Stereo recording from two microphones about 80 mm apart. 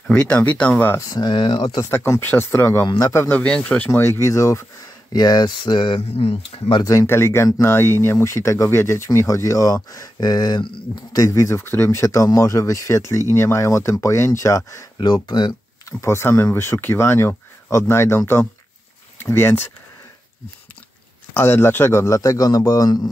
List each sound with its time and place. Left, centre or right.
0.1 s speech: centre
1.1 s speech: left
1.9 s speech: left
3.0 s speech: left
3.3 s speech: centre
4.0 s speech: left
5.1 s speech: left
6.9 s speech: left
9.8 s a sound: left
11.1 s speech: left
15.0 s speech: left
16.0 s speech: left
21.3 s speech: left